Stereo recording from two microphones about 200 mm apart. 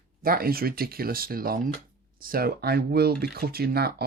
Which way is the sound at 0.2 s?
45° right (ahead or behind).